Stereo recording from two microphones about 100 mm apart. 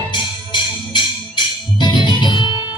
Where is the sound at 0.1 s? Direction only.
50° left (ahead or behind).